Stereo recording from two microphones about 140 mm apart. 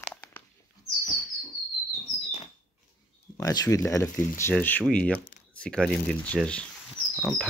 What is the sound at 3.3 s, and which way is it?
Speech, 25° left (ahead or behind).